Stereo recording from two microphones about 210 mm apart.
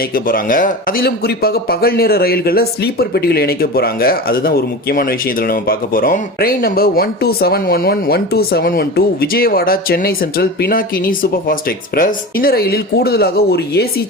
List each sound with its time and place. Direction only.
0.1 s a man's voice: 40° left (ahead or behind)